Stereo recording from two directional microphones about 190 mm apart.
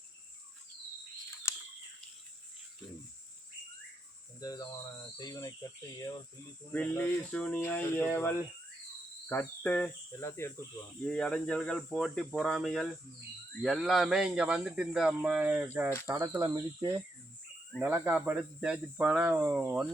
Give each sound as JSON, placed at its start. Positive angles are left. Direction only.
{"t": 1.5, "sound": "a sound", "side_deg": 15}
{"t": 4.4, "sound": "speech", "side_deg": 20}
{"t": 6.7, "sound": "speech", "side_deg": 10}
{"t": 16.0, "sound": "cricket", "side_deg": -15}